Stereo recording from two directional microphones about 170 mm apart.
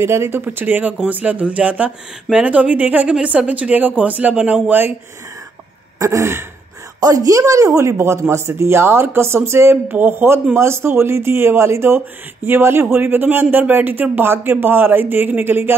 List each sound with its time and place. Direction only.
0.0 s speech: 15° right (ahead or behind)
5.9 s speech: 20° right (ahead or behind)